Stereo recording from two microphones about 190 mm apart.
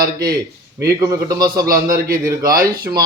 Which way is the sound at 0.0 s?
50° right (ahead or behind).